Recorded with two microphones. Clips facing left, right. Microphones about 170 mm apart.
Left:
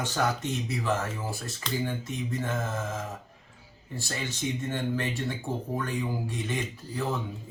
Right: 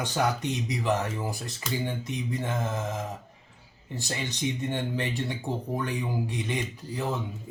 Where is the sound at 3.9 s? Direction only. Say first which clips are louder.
Right 1 dB; 20° right (ahead or behind).